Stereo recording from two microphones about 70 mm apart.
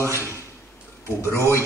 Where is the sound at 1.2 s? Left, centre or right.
Right.